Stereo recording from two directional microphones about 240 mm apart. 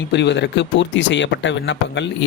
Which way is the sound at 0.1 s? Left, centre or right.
Left.